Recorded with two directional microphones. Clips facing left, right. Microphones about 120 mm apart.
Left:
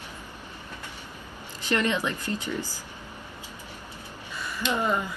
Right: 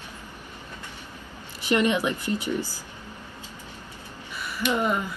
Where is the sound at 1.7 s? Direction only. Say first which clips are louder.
Right 4 dB; 15° right (ahead or behind).